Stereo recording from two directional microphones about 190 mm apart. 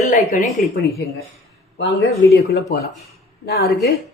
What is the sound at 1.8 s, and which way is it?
Speech, 60° left (ahead or behind).